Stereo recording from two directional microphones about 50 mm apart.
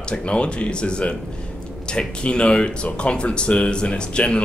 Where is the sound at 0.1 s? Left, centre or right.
Centre.